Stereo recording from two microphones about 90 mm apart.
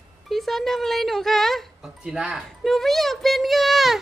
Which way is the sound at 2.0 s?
10° right (ahead or behind).